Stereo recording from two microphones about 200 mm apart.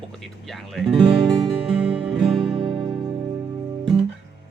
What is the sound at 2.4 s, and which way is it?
Music, 25° right (ahead or behind).